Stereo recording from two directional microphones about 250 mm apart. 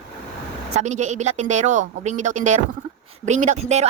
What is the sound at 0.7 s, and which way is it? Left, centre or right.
Speech, right.